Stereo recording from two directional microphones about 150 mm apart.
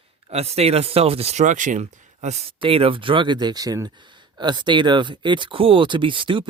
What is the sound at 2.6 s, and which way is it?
Speech, 40° right (ahead or behind).